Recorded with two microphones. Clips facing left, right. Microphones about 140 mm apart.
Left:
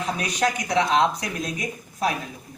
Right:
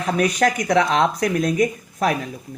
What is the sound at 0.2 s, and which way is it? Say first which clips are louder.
Speech: right 9 dB; 60° right (ahead or behind).